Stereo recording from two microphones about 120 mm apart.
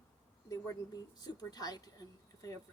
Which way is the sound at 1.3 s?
35° left (ahead or behind).